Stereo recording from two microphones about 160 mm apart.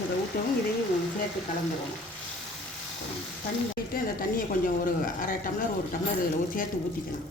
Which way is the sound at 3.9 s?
60° left (ahead or behind).